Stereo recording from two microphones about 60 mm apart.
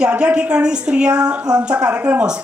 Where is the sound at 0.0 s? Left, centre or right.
Centre.